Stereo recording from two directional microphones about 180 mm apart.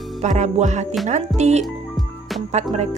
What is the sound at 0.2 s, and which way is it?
A woman's voice, 40° right (ahead or behind).